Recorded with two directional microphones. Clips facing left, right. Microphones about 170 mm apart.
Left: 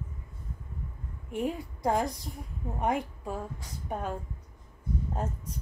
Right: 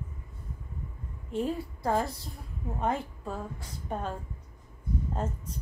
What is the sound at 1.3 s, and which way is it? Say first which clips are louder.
A woman's voice: right 1 dB; 15° left (ahead or behind).